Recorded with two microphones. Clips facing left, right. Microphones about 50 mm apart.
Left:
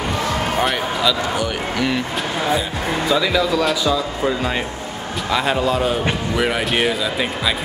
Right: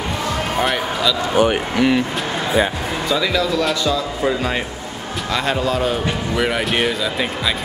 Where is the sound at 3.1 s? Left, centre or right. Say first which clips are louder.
Left 1 dB; centre.